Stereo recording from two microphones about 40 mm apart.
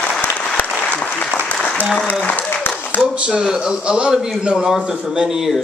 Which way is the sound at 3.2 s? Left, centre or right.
Right.